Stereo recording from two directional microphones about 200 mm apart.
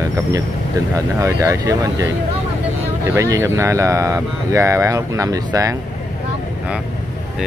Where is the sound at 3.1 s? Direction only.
15° right (ahead or behind).